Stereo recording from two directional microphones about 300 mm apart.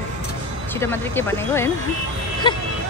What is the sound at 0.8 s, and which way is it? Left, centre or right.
Speech, centre.